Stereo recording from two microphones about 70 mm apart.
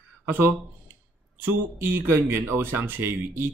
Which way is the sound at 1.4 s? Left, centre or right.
Right.